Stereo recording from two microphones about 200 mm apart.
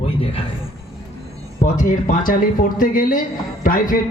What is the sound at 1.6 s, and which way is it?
A woman's voice, 40° left (ahead or behind).